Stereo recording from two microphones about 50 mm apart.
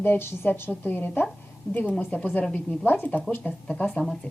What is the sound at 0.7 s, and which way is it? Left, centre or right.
Speech, left.